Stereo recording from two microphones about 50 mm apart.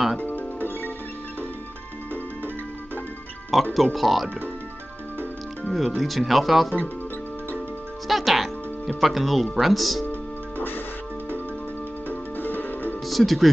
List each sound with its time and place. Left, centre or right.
0.2 s music: left
3.7 s speech: centre
5.7 s speech: centre
8.1 s speech: centre
12.1 s music: left
13.0 s speech: centre